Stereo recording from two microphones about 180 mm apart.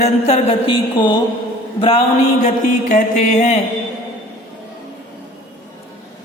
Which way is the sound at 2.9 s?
45° left (ahead or behind).